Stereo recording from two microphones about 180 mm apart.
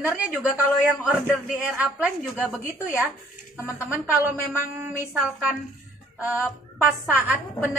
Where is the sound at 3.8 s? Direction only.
10° right (ahead or behind).